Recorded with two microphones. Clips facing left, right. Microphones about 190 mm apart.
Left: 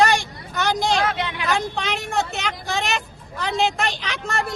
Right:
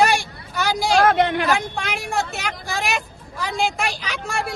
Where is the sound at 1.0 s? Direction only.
50° right (ahead or behind).